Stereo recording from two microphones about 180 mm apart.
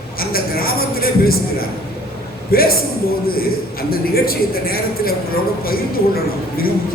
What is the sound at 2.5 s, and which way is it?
A man's voice, 55° left (ahead or behind).